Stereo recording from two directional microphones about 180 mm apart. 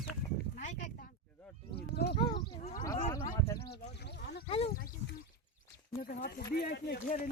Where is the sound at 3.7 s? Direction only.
65° left (ahead or behind).